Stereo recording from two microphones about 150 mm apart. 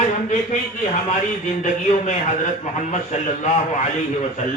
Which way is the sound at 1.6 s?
55° left (ahead or behind).